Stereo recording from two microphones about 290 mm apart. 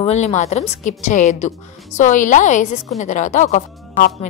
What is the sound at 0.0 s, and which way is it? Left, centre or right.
A woman's voice, left.